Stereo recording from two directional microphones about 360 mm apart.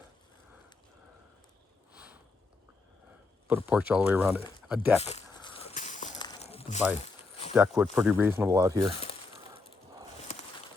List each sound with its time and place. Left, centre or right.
3.4 s speech: centre
4.9 s walk: centre
7.5 s speech: centre